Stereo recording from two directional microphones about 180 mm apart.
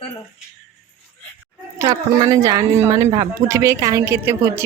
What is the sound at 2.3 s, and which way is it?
A woman's voice, 20° right (ahead or behind).